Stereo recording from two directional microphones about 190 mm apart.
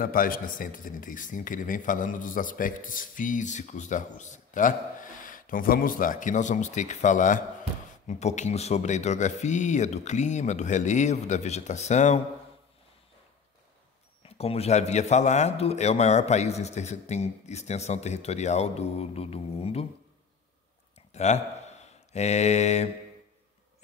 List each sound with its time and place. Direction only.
0.0 s a man's voice: 50° left (ahead or behind)
14.2 s a man's voice: 30° left (ahead or behind)
21.1 s speech: 35° left (ahead or behind)